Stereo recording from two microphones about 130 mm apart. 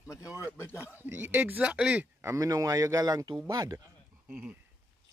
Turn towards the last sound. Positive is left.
turn(degrees=-10)  # may be behind; listen again after turning